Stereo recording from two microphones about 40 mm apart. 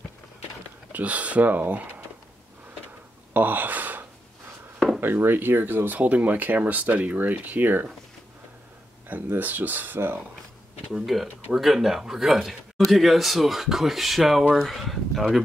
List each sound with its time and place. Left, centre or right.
0.9 s speech: right
3.3 s gasp: right
5.0 s speech: right
5.9 s speech: right
9.4 s speech: right
9.9 s speech: right
10.9 s speech: centre